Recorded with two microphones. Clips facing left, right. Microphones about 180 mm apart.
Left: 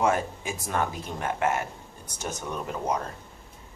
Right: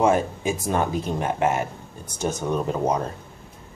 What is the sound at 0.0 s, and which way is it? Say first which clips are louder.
Speech: right 5 dB; 25° right (ahead or behind).